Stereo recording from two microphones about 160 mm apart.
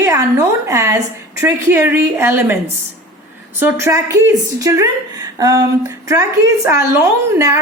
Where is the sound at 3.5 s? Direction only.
15° right (ahead or behind).